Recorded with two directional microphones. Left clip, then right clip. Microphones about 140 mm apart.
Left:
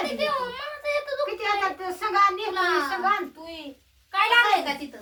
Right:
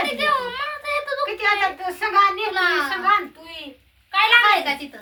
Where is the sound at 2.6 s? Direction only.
15° right (ahead or behind).